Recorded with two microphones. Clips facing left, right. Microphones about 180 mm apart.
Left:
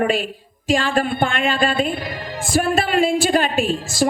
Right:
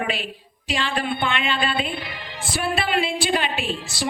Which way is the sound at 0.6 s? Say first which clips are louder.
Left 6 dB; 45° left (ahead or behind).